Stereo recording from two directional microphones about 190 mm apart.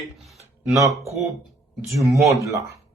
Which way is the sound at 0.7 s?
15° right (ahead or behind).